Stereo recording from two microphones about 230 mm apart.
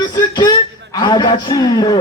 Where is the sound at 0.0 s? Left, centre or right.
Centre.